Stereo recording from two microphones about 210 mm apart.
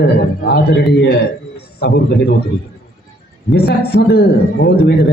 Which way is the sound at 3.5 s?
50° left (ahead or behind).